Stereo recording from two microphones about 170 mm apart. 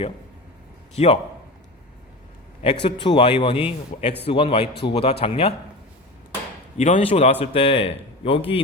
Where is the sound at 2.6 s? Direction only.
30° left (ahead or behind).